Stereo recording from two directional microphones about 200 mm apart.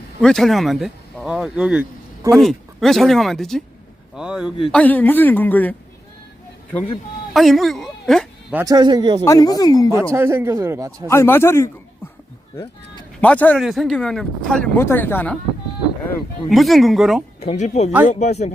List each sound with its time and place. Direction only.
0.2 s speech: centre (ahead or behind)
4.7 s a woman's voice: 10° left (ahead or behind)
7.3 s speech: centre (ahead or behind)
8.5 s a man's voice: 20° right (ahead or behind)
9.2 s speech: 20° left (ahead or behind)
10.1 s speech: 15° right (ahead or behind)
11.1 s a woman's voice: 10° left (ahead or behind)
13.2 s speech: 5° left (ahead or behind)
16.5 s speech: centre (ahead or behind)
17.4 s speech: 30° left (ahead or behind)